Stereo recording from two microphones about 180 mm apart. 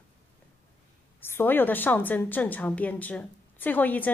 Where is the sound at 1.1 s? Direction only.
10° left (ahead or behind).